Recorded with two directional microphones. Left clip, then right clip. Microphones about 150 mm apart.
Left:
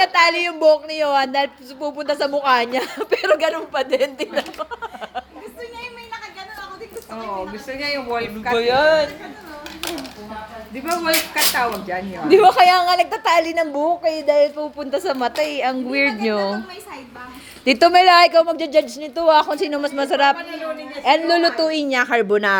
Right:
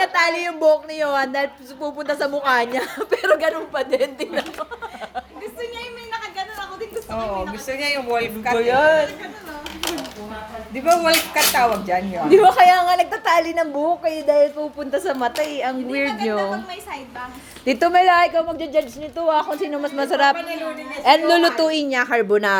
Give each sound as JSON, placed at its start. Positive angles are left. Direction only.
{"t": 0.0, "sound": "a woman's voice", "side_deg": 20}
{"t": 7.7, "sound": "speech", "side_deg": -45}
{"t": 8.5, "sound": "a woman's voice", "side_deg": 30}
{"t": 11.5, "sound": "speech", "side_deg": -45}
{"t": 12.3, "sound": "a woman's voice", "side_deg": 25}
{"t": 17.7, "sound": "a woman's voice", "side_deg": 25}